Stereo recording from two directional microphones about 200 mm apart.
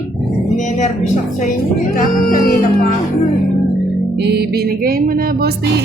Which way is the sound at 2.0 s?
40° left (ahead or behind).